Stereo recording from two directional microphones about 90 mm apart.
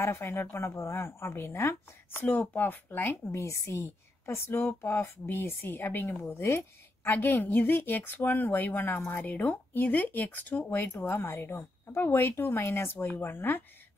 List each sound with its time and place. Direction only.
0.0 s a woman's voice: 30° left (ahead or behind)
2.2 s a woman's voice: 15° left (ahead or behind)